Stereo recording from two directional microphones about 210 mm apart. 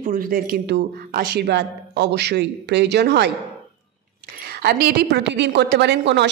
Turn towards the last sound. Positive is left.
turn(degrees=-55)  # may be behind; listen again after turning